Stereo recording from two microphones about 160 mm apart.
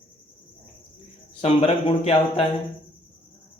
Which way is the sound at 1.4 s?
40° left (ahead or behind).